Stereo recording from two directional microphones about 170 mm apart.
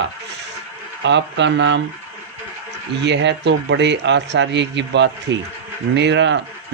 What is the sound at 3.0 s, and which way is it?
A man's voice, 90° right.